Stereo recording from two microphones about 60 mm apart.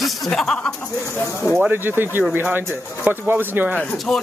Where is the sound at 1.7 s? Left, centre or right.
Right.